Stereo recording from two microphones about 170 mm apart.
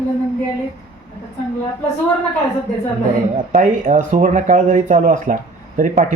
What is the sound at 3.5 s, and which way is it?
Speech, 50° right (ahead or behind).